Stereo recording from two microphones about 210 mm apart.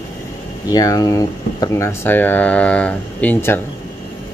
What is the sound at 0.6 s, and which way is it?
Speech, 15° left (ahead or behind).